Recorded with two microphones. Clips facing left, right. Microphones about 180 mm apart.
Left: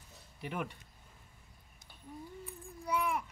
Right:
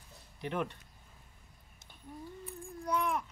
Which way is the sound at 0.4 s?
5° left (ahead or behind).